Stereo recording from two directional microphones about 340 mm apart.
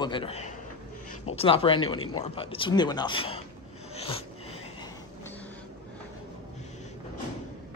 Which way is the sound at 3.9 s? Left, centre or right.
Centre.